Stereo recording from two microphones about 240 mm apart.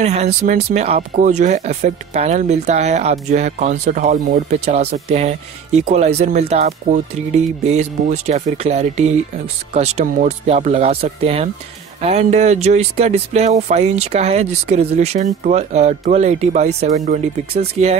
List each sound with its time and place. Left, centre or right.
0.0 s speech: right